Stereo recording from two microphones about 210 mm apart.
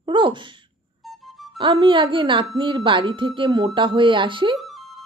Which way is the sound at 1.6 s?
20° right (ahead or behind).